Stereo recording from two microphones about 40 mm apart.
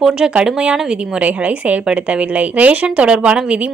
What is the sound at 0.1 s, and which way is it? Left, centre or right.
Speech, centre.